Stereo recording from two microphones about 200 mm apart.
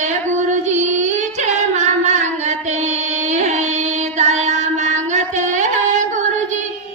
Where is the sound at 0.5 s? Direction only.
35° right (ahead or behind).